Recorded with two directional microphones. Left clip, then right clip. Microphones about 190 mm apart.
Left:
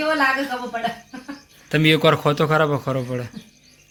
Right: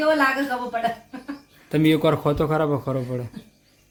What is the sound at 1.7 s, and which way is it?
A man's voice, 5° right (ahead or behind).